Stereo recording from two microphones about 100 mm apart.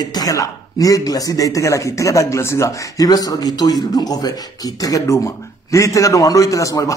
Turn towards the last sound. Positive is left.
turn(degrees=35)  # may be behind; listen again after turning